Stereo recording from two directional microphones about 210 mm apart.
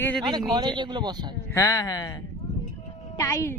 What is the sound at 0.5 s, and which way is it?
Speech, 20° right (ahead or behind).